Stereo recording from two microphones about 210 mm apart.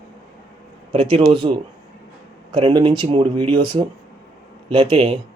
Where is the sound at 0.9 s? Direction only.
25° right (ahead or behind).